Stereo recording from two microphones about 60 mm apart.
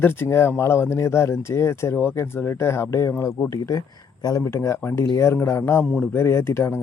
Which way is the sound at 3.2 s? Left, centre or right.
Left.